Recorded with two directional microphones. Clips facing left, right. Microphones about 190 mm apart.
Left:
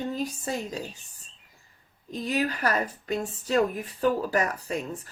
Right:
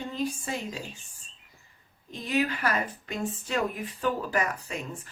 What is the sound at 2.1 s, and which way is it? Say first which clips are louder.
Speech: even; 40° left (ahead or behind).